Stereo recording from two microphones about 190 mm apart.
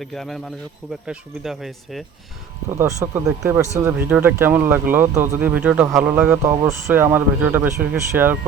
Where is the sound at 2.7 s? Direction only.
15° right (ahead or behind).